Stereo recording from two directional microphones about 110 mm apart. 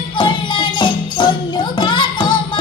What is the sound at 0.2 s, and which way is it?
Music, 45° left (ahead or behind).